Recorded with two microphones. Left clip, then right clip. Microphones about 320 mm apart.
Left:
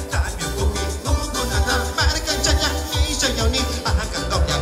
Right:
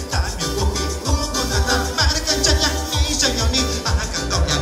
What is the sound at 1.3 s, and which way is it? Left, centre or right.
Music, centre.